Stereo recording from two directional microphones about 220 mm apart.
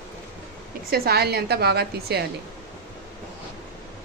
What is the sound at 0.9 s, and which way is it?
Speech, 45° right (ahead or behind).